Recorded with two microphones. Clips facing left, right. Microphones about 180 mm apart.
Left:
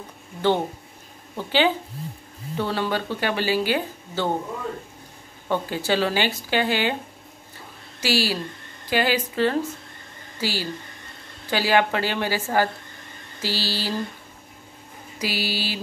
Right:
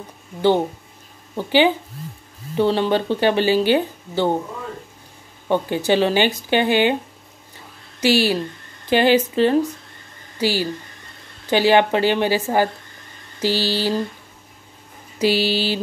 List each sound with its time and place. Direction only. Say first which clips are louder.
1.3 s speech: right 5 dB; 15° right (ahead or behind)
5.5 s speech: right 5 dB; 20° right (ahead or behind)
8.0 s speech: right 6 dB; 20° right (ahead or behind)
10.4 s mantra: right 7 dB; 15° right (ahead or behind)
11.5 s speech: right 6 dB; 20° right (ahead or behind)
13.4 s mantra: right 7 dB; 15° right (ahead or behind)
15.1 s speech: right 9 dB; 25° right (ahead or behind)